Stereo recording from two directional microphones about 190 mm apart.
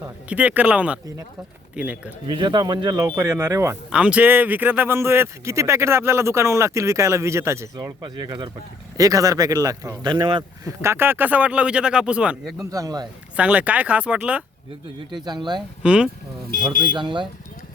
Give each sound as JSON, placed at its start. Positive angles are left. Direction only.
{"t": 0.3, "sound": "a man's voice", "side_deg": -5}
{"t": 2.2, "sound": "speech", "side_deg": -25}
{"t": 10.8, "sound": "speech", "side_deg": -10}
{"t": 12.7, "sound": "speech", "side_deg": -20}
{"t": 13.3, "sound": "speech", "side_deg": -5}
{"t": 15.1, "sound": "speech", "side_deg": -20}
{"t": 15.8, "sound": "speech", "side_deg": -5}
{"t": 16.9, "sound": "speech", "side_deg": -25}